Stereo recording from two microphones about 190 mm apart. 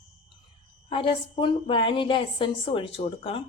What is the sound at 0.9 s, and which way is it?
A woman's voice, 25° left (ahead or behind).